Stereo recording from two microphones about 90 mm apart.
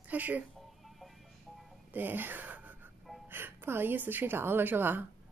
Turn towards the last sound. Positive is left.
turn(degrees=-20)  # may be behind; listen again after turning